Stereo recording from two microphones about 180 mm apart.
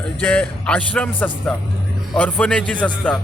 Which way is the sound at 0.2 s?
5° left (ahead or behind).